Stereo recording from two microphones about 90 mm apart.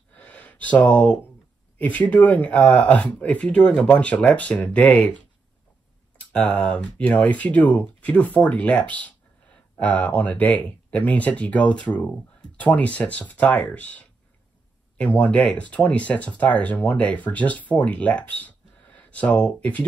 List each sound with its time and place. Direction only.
0.1 s gasp: 15° left (ahead or behind)
1.8 s speech: 15° left (ahead or behind)
6.3 s speech: 15° left (ahead or behind)